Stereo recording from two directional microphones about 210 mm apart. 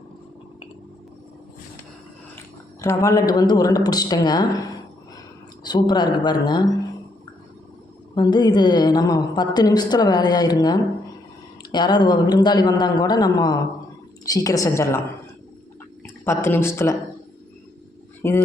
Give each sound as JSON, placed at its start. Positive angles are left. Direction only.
{"t": 2.8, "sound": "a woman's voice", "side_deg": 15}
{"t": 8.1, "sound": "a woman's voice", "side_deg": 20}
{"t": 16.0, "sound": "speech", "side_deg": 10}
{"t": 18.2, "sound": "speech", "side_deg": 10}